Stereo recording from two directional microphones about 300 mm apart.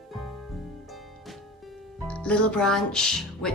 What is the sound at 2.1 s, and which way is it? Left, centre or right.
Speech, centre.